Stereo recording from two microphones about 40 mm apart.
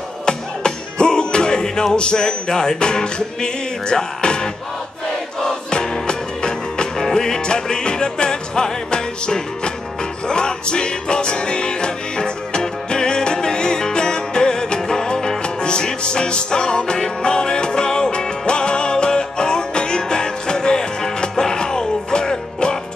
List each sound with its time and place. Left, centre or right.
0.2 s music: centre